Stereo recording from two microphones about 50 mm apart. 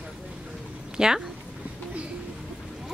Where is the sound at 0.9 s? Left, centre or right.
Centre.